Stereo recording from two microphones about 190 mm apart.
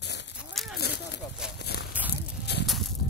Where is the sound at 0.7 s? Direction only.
60° left (ahead or behind).